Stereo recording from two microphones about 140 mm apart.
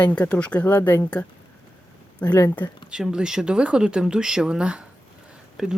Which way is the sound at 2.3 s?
20° left (ahead or behind).